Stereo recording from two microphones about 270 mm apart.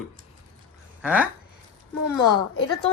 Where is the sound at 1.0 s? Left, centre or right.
Centre.